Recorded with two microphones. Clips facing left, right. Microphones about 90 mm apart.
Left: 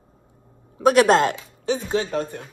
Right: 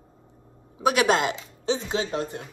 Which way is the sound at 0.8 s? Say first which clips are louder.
Left 6 dB; 40° left (ahead or behind).